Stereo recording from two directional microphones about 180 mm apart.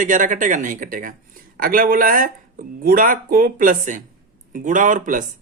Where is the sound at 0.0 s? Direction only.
45° right (ahead or behind).